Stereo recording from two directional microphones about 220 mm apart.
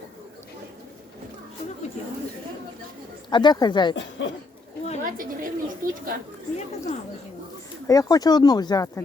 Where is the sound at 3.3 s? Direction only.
20° left (ahead or behind).